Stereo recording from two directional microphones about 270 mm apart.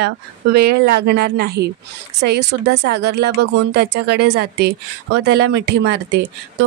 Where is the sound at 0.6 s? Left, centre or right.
Right.